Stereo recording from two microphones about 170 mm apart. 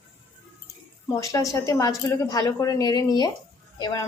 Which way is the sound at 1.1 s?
20° left (ahead or behind).